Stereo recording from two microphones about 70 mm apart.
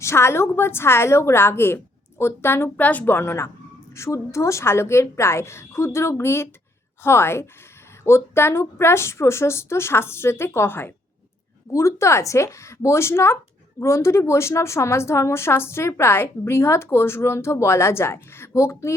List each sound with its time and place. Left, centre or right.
0.0 s speech: left
11.7 s speech: left